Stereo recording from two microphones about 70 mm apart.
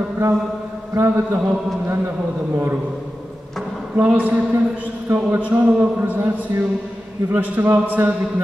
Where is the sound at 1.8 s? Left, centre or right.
Right.